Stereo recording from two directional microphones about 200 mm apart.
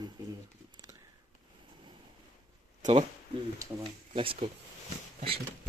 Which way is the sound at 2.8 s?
30° right (ahead or behind).